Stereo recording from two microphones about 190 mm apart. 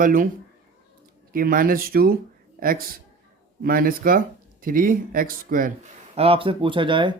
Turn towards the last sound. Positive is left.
turn(degrees=-25)  # may be behind; listen again after turning